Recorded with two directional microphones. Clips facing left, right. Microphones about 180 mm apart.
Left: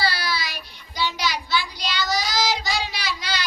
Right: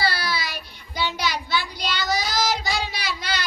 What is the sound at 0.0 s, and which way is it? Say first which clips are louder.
Child singing: even; 55° right (ahead or behind).